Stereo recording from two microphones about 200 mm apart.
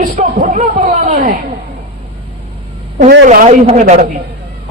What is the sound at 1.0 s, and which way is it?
Speech, 45° right (ahead or behind).